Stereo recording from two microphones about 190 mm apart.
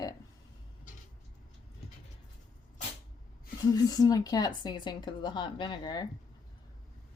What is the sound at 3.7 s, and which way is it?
Speech, 20° left (ahead or behind).